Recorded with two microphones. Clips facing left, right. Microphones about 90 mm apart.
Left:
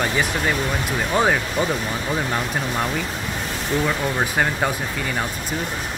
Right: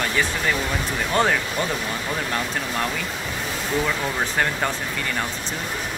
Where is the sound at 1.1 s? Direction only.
15° left (ahead or behind).